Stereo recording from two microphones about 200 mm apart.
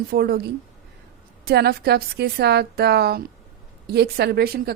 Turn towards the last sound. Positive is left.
turn(degrees=-50)  # may be behind; listen again after turning